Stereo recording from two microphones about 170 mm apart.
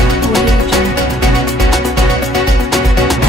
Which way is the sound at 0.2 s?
Centre (ahead or behind).